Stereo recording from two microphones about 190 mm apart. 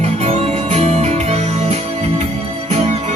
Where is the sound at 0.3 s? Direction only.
35° right (ahead or behind).